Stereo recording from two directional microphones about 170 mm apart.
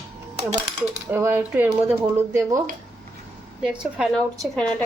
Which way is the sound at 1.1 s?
15° right (ahead or behind).